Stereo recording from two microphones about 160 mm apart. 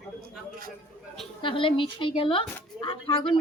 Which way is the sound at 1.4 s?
35° left (ahead or behind).